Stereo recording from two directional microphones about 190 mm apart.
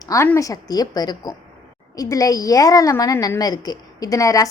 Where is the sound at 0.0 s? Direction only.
15° left (ahead or behind).